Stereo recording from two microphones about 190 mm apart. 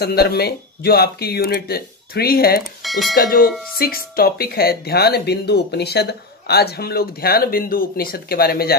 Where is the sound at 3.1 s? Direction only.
50° left (ahead or behind).